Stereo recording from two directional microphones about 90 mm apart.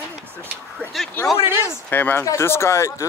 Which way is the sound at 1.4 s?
25° right (ahead or behind).